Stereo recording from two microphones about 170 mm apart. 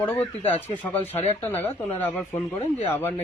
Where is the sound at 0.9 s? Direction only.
35° left (ahead or behind).